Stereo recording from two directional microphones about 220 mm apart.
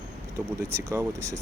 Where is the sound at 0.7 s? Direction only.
15° right (ahead or behind).